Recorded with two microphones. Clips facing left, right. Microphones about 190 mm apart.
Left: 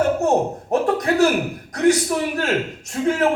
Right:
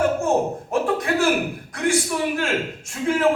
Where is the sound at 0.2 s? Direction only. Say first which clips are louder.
Left 2 dB; 40° left (ahead or behind).